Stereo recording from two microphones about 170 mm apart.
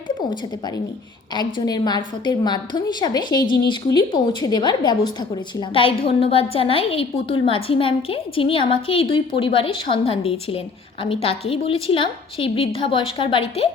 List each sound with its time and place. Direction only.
1.3 s a woman's voice: 25° left (ahead or behind)